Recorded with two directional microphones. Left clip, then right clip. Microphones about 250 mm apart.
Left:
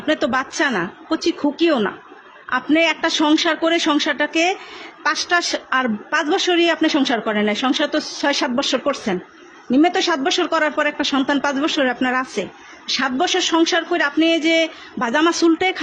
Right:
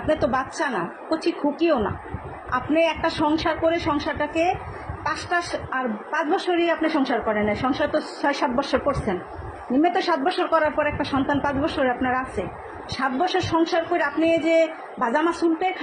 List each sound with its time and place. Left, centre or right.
0.1 s a woman's voice: left
5.0 s a woman's voice: left